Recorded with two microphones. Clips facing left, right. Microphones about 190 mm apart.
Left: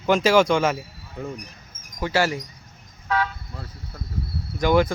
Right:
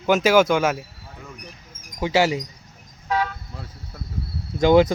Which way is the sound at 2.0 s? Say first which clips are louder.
Right 3 dB; 15° right (ahead or behind).